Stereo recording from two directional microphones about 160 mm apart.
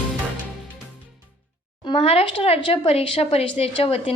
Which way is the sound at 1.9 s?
35° left (ahead or behind).